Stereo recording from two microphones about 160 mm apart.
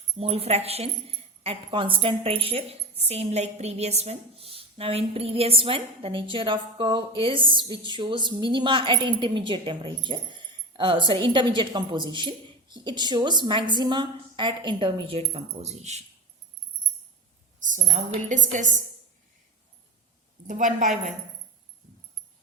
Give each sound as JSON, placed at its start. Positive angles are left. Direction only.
{"t": 0.2, "sound": "a woman's voice", "side_deg": -40}
{"t": 17.6, "sound": "a woman's voice", "side_deg": -50}
{"t": 20.5, "sound": "a woman's voice", "side_deg": -55}